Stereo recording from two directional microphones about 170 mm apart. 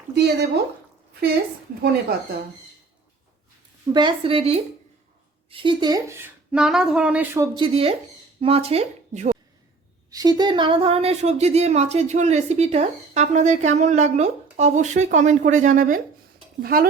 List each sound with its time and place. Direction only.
0.1 s speech: 80° right
3.9 s speech: 30° right (ahead or behind); by 7.4 s 10° right (ahead or behind)
7.4 s speech: 30° right (ahead or behind); by 9.4 s 45° right (ahead or behind)
10.1 s speech: 20° right (ahead or behind); by 16.8 s 60° right (ahead or behind)